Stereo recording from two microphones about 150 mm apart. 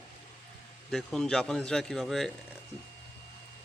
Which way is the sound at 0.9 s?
Centre (ahead or behind).